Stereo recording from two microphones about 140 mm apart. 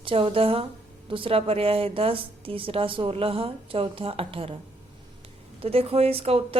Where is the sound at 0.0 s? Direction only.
40° right (ahead or behind).